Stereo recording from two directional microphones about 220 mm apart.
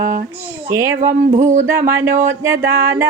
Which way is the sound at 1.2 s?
30° right (ahead or behind).